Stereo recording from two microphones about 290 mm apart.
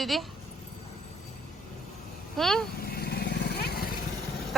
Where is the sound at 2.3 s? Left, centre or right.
Centre.